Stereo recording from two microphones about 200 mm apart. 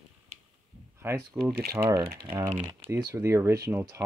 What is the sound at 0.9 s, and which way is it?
Speech, 15° right (ahead or behind).